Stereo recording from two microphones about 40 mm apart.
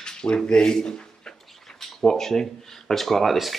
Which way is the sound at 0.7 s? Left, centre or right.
Centre.